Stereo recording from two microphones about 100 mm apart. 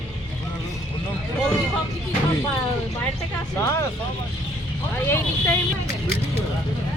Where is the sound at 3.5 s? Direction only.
25° left (ahead or behind).